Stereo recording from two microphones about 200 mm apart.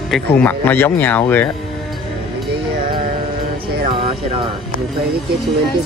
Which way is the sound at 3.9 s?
25° right (ahead or behind).